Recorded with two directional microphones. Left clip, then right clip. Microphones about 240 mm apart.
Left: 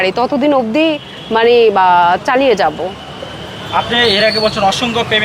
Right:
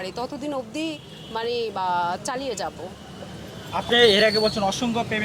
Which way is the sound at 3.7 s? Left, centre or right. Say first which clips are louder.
Left 6 dB; right.